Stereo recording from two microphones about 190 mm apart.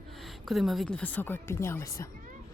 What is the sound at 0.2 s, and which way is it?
A woman's voice, centre (ahead or behind).